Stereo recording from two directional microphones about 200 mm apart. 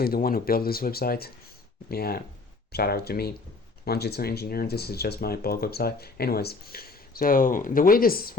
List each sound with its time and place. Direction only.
0.0 s speech: 50° left (ahead or behind)